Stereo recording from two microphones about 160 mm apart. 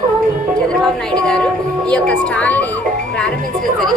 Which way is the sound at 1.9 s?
5° left (ahead or behind).